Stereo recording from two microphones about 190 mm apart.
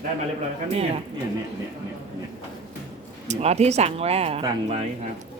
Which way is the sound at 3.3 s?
35° right (ahead or behind).